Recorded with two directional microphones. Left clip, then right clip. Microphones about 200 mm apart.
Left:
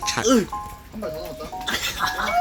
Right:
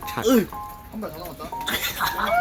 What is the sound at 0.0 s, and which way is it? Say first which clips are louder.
Speech: left 1 dB; centre (ahead or behind).